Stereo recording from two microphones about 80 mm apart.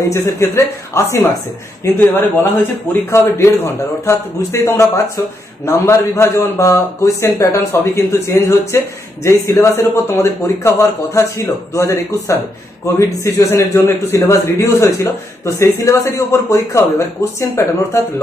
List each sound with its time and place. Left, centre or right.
0.1 s speech: left
13.5 s a man's voice: left